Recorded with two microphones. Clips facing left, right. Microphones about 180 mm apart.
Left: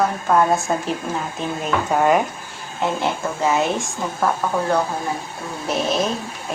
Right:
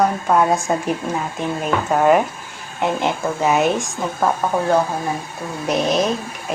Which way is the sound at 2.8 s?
15° right (ahead or behind).